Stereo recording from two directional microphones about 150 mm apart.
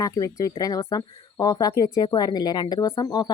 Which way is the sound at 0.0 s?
25° left (ahead or behind).